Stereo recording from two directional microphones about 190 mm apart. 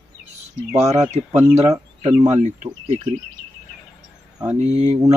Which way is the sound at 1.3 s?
10° right (ahead or behind).